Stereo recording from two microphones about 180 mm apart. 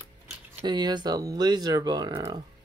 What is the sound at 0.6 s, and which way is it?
Speech, 25° right (ahead or behind).